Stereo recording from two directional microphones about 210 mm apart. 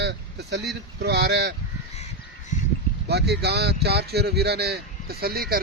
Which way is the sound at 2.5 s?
35° left (ahead or behind).